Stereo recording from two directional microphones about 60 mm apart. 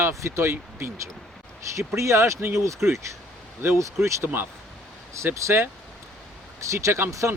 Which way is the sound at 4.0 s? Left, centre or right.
Right.